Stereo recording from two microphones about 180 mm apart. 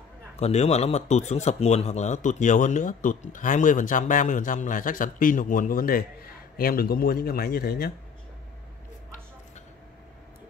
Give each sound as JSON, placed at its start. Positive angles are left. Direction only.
{"t": 0.4, "sound": "speech", "side_deg": 40}